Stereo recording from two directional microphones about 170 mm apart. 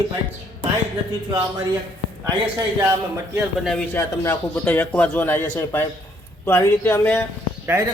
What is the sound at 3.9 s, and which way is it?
Speech, 10° left (ahead or behind).